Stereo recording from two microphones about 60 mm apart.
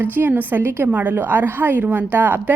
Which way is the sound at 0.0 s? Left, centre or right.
Right.